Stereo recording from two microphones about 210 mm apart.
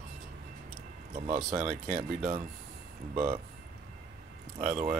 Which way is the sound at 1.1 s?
25° right (ahead or behind).